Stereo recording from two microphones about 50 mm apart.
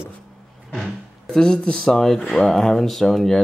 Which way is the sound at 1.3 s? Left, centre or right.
Centre.